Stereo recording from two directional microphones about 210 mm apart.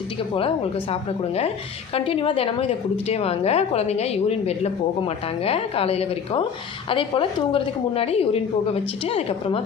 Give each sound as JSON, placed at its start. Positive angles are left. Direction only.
{"t": 0.3, "sound": "a woman's voice", "side_deg": 25}